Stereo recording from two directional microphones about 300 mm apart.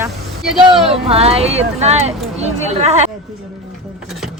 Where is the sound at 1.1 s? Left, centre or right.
Centre.